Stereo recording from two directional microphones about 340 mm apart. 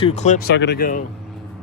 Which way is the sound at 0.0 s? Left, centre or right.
Centre.